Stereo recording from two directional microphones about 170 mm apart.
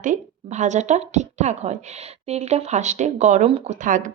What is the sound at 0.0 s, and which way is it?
A woman's voice, 45° right (ahead or behind).